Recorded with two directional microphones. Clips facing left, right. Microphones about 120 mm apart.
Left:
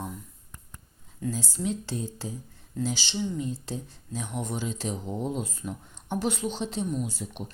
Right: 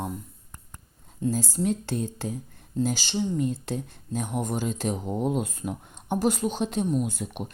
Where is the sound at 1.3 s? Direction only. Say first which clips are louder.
Right 4 dB; 45° right (ahead or behind).